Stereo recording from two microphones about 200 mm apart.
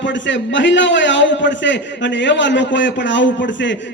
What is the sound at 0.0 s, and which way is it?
A man's voice, 65° left (ahead or behind).